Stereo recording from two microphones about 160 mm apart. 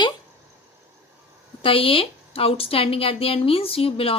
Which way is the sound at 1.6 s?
35° left (ahead or behind).